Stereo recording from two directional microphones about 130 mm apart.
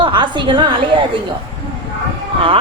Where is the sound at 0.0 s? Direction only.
35° right (ahead or behind).